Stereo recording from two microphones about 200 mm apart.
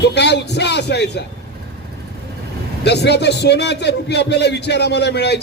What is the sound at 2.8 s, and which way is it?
Speech, 55° left (ahead or behind).